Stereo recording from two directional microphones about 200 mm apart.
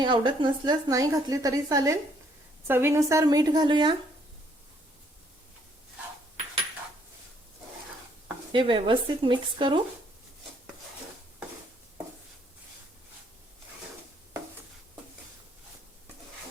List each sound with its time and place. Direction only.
0.0 s a woman's voice: 25° right (ahead or behind)
8.5 s a woman's voice: 25° right (ahead or behind)